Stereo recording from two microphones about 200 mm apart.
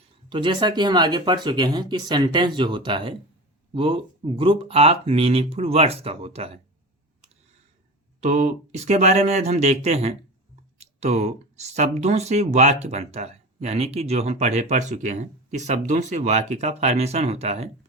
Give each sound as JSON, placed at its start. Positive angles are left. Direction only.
{"t": 0.3, "sound": "speech", "side_deg": -25}
{"t": 8.2, "sound": "speech", "side_deg": -35}